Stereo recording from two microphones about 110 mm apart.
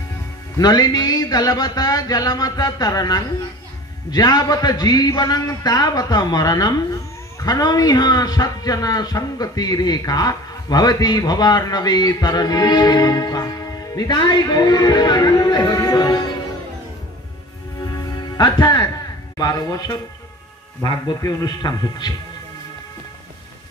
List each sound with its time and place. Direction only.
0.6 s a man's voice: 35° left (ahead or behind)
17.8 s music: 35° left (ahead or behind)
19.3 s a man's voice: 35° left (ahead or behind)
21.2 s a man's voice: 30° left (ahead or behind)